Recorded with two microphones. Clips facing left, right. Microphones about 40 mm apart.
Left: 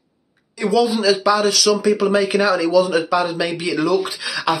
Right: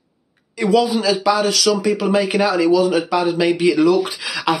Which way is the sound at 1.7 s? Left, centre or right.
Centre.